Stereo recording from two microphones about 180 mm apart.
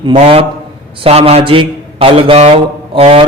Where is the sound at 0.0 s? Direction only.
30° right (ahead or behind).